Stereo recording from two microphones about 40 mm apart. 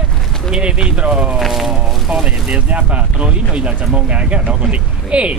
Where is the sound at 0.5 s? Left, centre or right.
Right.